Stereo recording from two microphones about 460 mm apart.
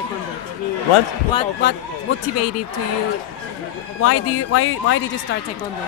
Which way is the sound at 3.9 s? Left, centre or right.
Left.